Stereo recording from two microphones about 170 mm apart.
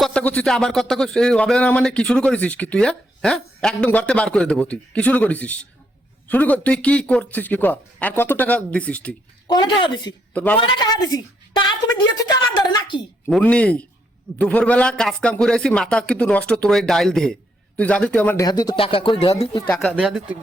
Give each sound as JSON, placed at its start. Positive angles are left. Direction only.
{"t": 0.0, "sound": "a man's voice", "side_deg": 5}
{"t": 9.5, "sound": "speech", "side_deg": 25}
{"t": 10.3, "sound": "a man's voice", "side_deg": 10}
{"t": 10.6, "sound": "a woman's voice", "side_deg": 25}
{"t": 13.3, "sound": "a man's voice", "side_deg": 5}
{"t": 18.3, "sound": "speech", "side_deg": 20}
{"t": 19.6, "sound": "a man's voice", "side_deg": 10}
{"t": 20.0, "sound": "a man's voice", "side_deg": -5}